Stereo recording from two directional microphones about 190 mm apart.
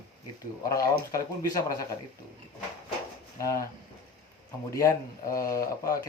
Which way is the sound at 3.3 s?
15° left (ahead or behind).